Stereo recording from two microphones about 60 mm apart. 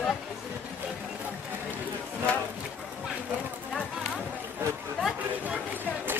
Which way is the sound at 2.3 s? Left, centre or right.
Centre.